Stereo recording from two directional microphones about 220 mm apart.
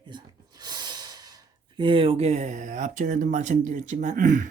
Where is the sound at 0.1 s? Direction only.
20° right (ahead or behind).